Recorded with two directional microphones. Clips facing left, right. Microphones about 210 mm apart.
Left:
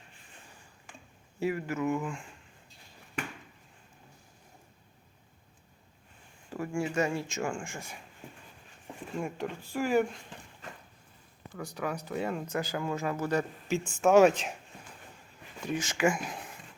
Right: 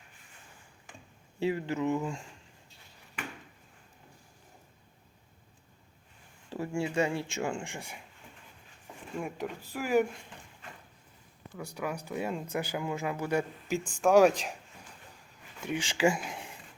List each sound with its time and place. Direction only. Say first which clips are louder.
1.4 s speech: right 1 dB; 25° right (ahead or behind)
6.5 s speech: even; 20° right (ahead or behind)
9.1 s speech: left 1 dB; 5° right (ahead or behind)
11.5 s speech: left 1 dB; 10° right (ahead or behind)
14.0 s speech: left 1 dB; centre (ahead or behind)
15.6 s speech: right 1 dB; 30° right (ahead or behind)